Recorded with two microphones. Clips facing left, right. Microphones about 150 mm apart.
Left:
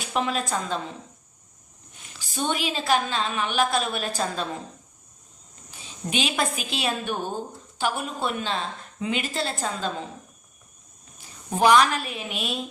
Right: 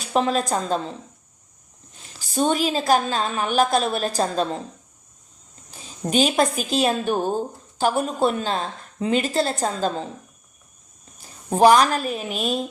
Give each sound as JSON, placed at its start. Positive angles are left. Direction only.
{"t": 0.0, "sound": "a woman's voice", "side_deg": -35}
{"t": 2.0, "sound": "a woman's voice", "side_deg": -35}
{"t": 5.8, "sound": "a woman's voice", "side_deg": -40}
{"t": 11.2, "sound": "a woman's voice", "side_deg": -35}